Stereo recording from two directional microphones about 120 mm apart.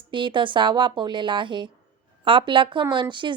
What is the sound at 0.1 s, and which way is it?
A woman's voice, 45° right (ahead or behind).